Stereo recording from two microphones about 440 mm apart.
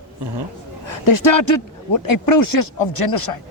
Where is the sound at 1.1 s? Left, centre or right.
Left.